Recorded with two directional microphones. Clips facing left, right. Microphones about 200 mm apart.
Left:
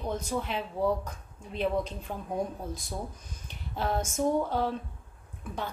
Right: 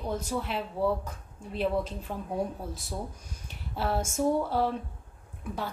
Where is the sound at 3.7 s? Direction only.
5° right (ahead or behind).